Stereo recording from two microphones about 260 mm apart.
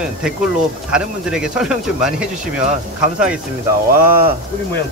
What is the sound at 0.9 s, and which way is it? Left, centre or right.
Speech, centre.